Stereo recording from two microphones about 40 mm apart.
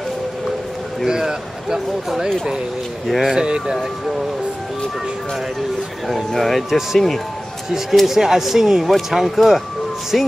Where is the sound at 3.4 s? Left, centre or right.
Right.